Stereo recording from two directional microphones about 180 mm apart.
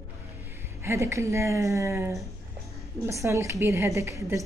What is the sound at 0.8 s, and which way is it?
A woman's voice, 15° right (ahead or behind).